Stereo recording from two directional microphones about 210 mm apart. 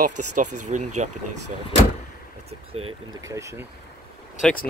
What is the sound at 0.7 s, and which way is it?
Speech, 35° right (ahead or behind).